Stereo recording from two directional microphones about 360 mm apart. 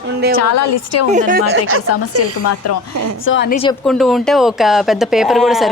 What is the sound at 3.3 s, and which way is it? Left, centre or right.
Speech, left.